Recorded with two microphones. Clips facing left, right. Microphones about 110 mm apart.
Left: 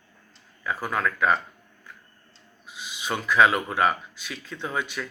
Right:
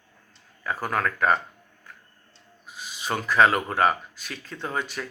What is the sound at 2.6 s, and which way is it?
Speech, 40° right (ahead or behind).